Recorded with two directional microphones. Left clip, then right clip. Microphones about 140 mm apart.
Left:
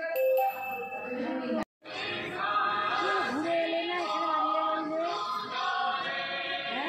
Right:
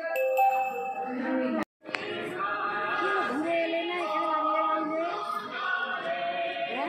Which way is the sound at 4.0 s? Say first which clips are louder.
Right 2 dB; 45° left (ahead or behind).